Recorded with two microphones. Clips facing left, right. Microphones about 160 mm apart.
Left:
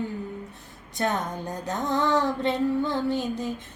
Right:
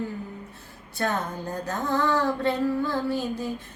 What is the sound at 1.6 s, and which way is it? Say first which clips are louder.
Female singing: even; 20° left (ahead or behind).